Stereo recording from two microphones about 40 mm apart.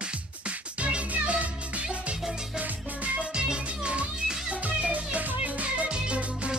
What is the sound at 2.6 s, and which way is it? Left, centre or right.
Music, right.